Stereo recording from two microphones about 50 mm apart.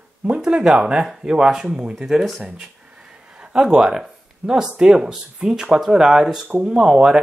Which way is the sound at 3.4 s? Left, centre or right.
Centre.